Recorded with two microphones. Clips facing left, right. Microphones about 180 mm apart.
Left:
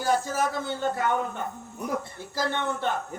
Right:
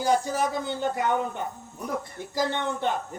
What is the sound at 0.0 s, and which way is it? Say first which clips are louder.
Speech: right 1 dB; 15° right (ahead or behind).